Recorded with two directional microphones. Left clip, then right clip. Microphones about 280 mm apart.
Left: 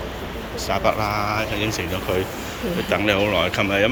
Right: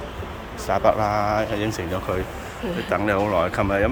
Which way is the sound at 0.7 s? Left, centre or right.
Right.